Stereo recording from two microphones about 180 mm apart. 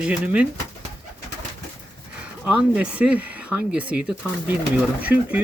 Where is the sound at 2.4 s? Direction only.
10° right (ahead or behind).